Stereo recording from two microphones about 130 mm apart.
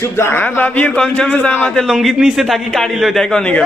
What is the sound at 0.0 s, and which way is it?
A man's voice, 20° left (ahead or behind).